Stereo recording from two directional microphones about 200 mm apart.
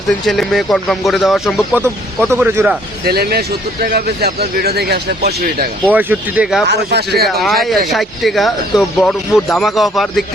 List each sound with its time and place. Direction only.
0.3 s speech: centre (ahead or behind)
3.0 s speech: 50° right (ahead or behind)
5.9 s speech: 10° right (ahead or behind)
6.7 s speech: 55° right (ahead or behind)
7.4 s speech: centre (ahead or behind)